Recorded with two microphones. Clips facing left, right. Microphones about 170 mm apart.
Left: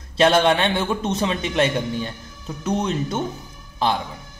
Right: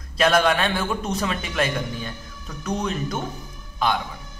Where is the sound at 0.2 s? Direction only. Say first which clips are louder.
Left 3 dB; 30° left (ahead or behind).